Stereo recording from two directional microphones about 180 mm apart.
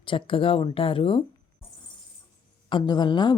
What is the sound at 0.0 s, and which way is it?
A woman's voice, 30° left (ahead or behind).